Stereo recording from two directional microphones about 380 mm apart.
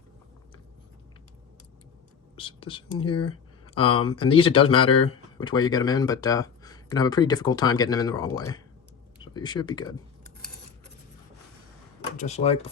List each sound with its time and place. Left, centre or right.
2.3 s speech: centre
12.1 s speech: centre